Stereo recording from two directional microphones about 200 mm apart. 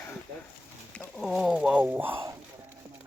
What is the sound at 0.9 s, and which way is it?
Speech, centre (ahead or behind).